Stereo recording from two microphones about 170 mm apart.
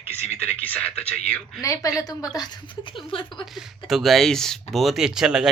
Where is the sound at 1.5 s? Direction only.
20° left (ahead or behind).